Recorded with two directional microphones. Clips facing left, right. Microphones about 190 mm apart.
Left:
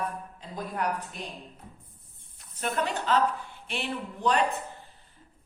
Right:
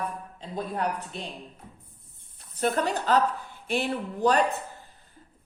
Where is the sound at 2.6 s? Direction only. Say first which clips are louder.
Right 4 dB; 35° right (ahead or behind).